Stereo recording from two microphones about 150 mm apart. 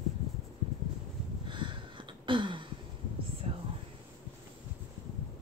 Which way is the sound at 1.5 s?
35° right (ahead or behind).